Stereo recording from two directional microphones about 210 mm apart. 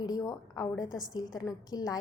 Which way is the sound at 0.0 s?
15° left (ahead or behind).